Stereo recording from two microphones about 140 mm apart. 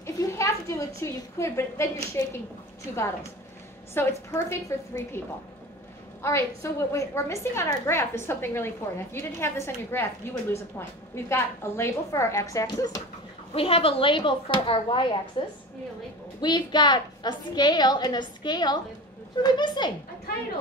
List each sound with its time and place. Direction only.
0.0 s a woman's voice: 20° left (ahead or behind)
3.9 s a woman's voice: 15° left (ahead or behind)
6.2 s a woman's voice: 20° left (ahead or behind)
13.6 s a woman's voice: 40° left (ahead or behind)